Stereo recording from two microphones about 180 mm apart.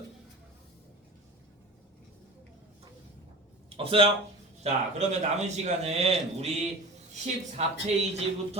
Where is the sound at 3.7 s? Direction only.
30° right (ahead or behind).